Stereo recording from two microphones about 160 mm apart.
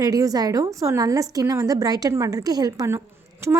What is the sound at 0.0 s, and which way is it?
A woman's voice, 20° right (ahead or behind).